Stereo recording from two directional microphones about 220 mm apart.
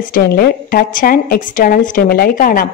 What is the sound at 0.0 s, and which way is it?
Speech, 45° left (ahead or behind).